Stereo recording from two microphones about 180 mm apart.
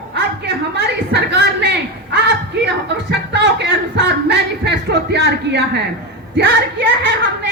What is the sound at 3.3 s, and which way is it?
Speech, 80° right.